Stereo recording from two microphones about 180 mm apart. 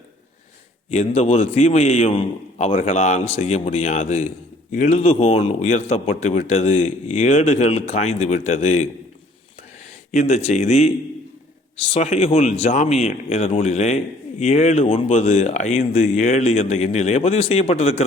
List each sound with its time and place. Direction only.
0.9 s a man's voice: 35° left (ahead or behind)
10.1 s a man's voice: 40° left (ahead or behind)
11.9 s a man's voice: 40° left (ahead or behind)